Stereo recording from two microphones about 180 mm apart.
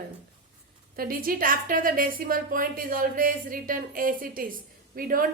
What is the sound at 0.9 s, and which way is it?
A woman's voice, 50° right (ahead or behind).